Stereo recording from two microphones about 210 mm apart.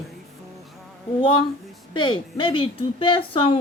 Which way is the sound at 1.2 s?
25° left (ahead or behind).